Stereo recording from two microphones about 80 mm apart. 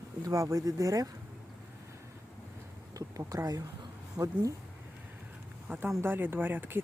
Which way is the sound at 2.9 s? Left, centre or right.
Right.